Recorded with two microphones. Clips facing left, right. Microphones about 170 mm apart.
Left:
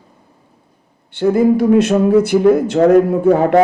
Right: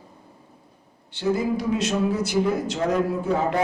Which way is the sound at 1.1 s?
55° left (ahead or behind).